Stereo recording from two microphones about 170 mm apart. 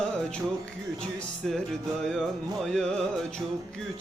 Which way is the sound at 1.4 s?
Centre (ahead or behind).